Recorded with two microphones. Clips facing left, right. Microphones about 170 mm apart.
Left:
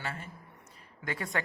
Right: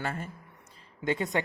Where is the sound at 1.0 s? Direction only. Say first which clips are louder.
Right 6 dB; 20° right (ahead or behind).